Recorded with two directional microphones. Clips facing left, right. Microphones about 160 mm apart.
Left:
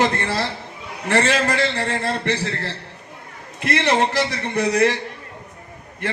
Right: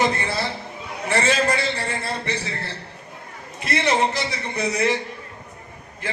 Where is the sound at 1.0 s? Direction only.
75° left (ahead or behind).